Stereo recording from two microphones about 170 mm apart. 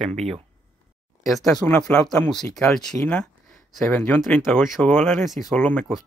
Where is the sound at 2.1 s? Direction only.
5° left (ahead or behind).